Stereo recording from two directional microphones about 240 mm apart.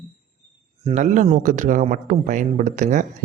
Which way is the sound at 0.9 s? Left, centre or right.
Right.